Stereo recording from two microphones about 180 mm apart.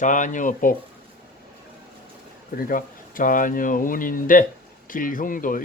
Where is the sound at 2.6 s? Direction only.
50° left (ahead or behind).